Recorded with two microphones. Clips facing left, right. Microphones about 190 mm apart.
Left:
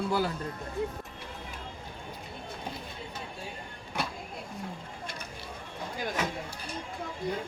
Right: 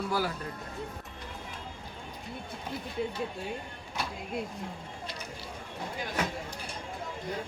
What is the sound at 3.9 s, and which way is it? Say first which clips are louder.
Vehicle: left 2 dB; 55° left (ahead or behind).